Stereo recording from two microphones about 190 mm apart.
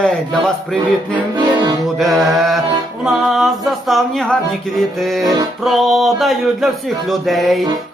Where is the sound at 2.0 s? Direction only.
Centre (ahead or behind).